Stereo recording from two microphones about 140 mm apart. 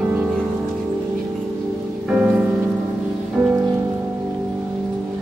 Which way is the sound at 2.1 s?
5° right (ahead or behind).